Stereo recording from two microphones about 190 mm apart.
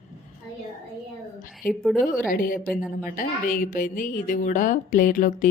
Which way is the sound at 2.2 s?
45° left (ahead or behind).